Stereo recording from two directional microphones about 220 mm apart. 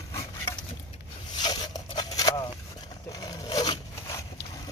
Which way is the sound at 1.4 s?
20° left (ahead or behind).